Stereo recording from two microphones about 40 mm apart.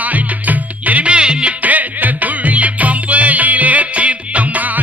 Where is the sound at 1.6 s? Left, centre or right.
Right.